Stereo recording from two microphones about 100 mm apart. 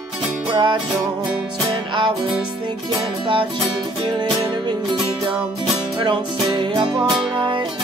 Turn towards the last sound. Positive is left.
turn(degrees=-50)  # may be behind; listen again after turning